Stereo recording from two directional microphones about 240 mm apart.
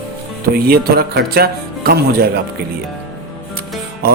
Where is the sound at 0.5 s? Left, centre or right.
Right.